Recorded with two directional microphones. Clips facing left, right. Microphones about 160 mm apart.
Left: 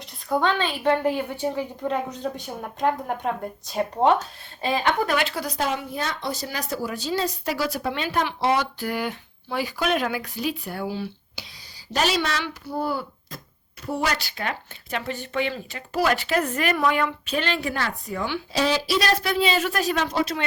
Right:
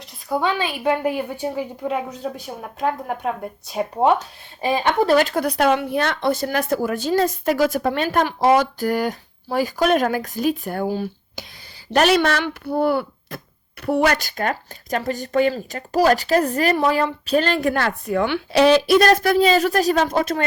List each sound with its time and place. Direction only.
0.3 s a woman's voice: 5° right (ahead or behind)
4.6 s speech: 20° right (ahead or behind)
5.0 s speech: 40° right (ahead or behind)
11.9 s speech: 60° right (ahead or behind)